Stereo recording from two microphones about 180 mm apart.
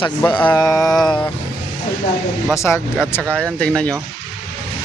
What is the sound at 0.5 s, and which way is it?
Mantra, 20° left (ahead or behind).